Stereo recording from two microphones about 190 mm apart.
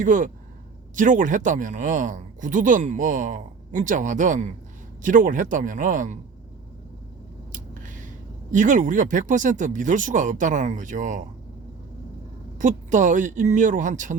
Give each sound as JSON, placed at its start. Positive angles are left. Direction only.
{"t": 0.0, "sound": "speech", "side_deg": -40}
{"t": 7.5, "sound": "speech", "side_deg": -45}
{"t": 12.5, "sound": "speech", "side_deg": -40}